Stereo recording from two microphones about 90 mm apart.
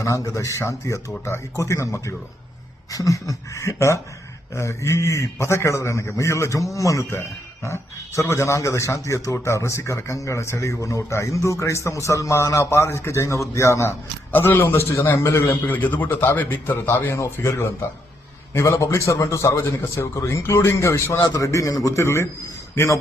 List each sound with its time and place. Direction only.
0.0 s a man's voice: 35° left (ahead or behind)
14.3 s a man's voice: 20° left (ahead or behind)